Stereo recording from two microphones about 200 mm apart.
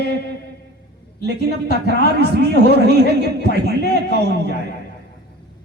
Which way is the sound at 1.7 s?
55° right (ahead or behind).